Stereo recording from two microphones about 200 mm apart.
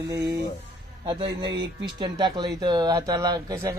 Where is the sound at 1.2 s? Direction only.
60° right (ahead or behind).